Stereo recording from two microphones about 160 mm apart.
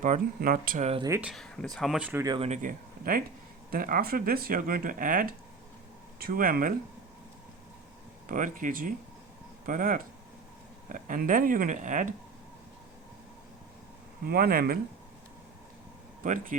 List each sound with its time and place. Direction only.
0.0 s speech: 55° right (ahead or behind)
1.2 s speech: centre (ahead or behind)
2.4 s speech: 50° right (ahead or behind)
6.1 s speech: 70° right (ahead or behind)
8.3 s speech: 55° right (ahead or behind)
14.3 s speech: 70° right (ahead or behind)
16.2 s speech: 55° right (ahead or behind)